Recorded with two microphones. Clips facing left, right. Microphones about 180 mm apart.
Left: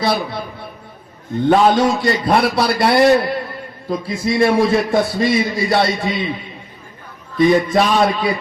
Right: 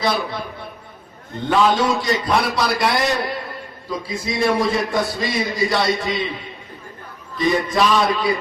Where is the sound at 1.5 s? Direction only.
45° left (ahead or behind).